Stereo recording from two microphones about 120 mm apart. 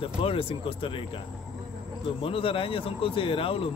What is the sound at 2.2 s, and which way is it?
Speech, 50° left (ahead or behind).